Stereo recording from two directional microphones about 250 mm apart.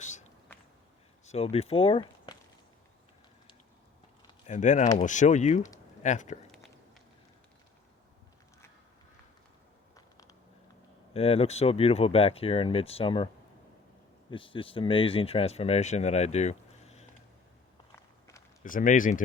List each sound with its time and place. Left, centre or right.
0.0 s walk: left
1.2 s speech: left
4.4 s speech: left
11.1 s speech: left
14.3 s speech: left
18.6 s speech: left